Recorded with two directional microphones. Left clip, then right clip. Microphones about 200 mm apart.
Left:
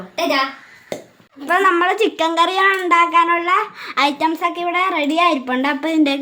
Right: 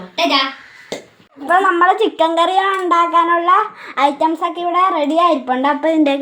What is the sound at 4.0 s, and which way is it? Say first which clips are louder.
A woman's voice: right 2 dB; 30° left (ahead or behind).